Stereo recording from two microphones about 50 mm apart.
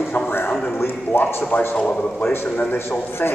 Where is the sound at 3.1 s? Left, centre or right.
Left.